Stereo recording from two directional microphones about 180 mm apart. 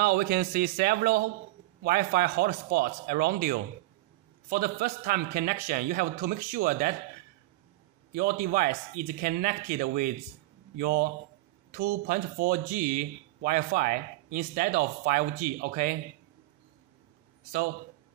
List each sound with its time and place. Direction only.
0.0 s speech: 60° right (ahead or behind)
8.1 s speech: 50° right (ahead or behind)